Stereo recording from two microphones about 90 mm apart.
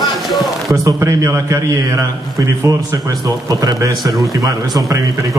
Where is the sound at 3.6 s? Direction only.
45° right (ahead or behind).